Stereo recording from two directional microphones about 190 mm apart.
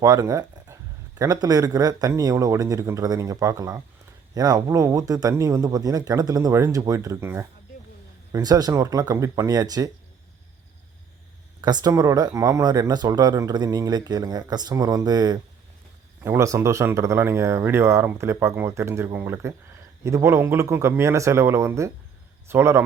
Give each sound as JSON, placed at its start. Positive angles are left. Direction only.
{"t": 0.0, "sound": "speech", "side_deg": -20}
{"t": 11.6, "sound": "speech", "side_deg": -20}